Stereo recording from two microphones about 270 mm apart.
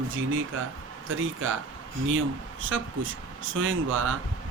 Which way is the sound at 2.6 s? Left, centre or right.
Right.